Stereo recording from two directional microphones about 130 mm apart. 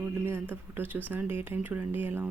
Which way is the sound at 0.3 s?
20° right (ahead or behind).